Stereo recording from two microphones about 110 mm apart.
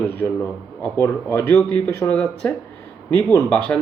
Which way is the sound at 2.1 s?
5° left (ahead or behind).